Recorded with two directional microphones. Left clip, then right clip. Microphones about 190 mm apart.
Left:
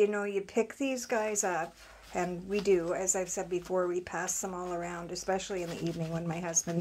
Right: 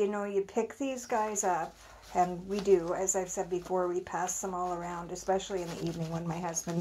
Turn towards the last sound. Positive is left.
turn(degrees=10)  # may be behind; listen again after turning